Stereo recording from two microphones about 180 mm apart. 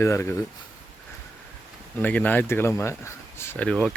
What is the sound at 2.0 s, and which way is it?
Speech, 10° left (ahead or behind).